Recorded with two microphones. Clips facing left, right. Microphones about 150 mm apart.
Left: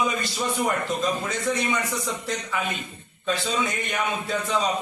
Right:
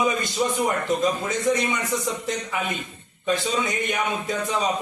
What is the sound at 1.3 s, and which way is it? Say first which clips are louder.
A man's voice: right 3 dB; 20° right (ahead or behind).